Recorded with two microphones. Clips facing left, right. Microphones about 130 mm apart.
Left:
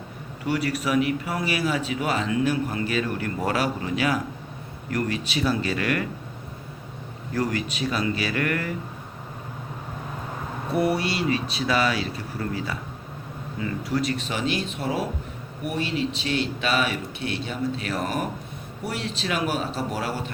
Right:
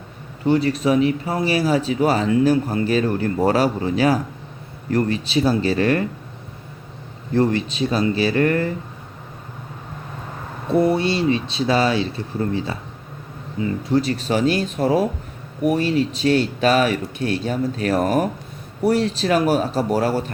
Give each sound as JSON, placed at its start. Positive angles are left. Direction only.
{"t": 0.4, "sound": "speech", "side_deg": -30}
{"t": 7.3, "sound": "speech", "side_deg": -30}
{"t": 10.7, "sound": "speech", "side_deg": -25}